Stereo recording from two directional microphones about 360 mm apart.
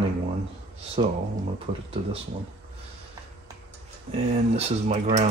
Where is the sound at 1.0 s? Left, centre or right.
Centre.